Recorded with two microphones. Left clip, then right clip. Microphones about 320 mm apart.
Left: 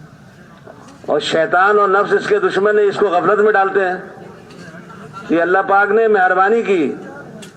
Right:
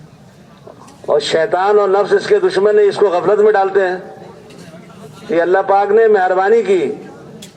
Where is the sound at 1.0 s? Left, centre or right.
Right.